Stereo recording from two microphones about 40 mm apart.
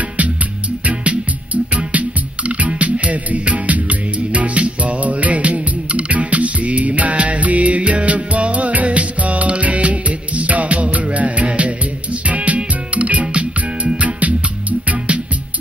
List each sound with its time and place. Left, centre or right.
0.8 s music: right